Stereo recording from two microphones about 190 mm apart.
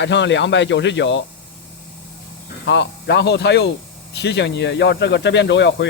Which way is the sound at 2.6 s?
65° left (ahead or behind).